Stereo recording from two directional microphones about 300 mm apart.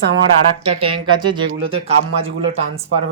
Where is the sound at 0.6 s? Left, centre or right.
Centre.